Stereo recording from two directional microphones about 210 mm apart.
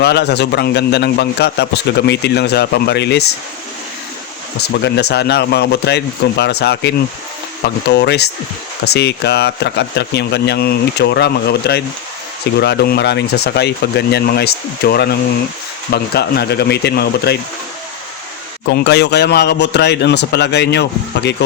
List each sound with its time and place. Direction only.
0.0 s a man's voice: 50° left (ahead or behind)
4.7 s a man's voice: 50° left (ahead or behind)
18.7 s a man's voice: 55° left (ahead or behind)